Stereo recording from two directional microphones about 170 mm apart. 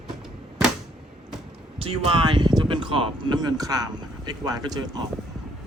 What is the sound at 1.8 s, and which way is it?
Speech, 30° right (ahead or behind).